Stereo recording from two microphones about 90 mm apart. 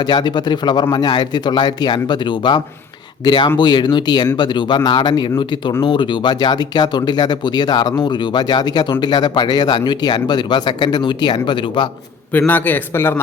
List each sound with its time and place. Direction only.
0.0 s a man's voice: 50° left (ahead or behind)
12.5 s a man's voice: 20° left (ahead or behind)